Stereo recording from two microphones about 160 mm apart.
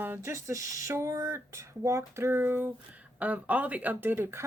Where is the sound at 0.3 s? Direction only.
20° right (ahead or behind).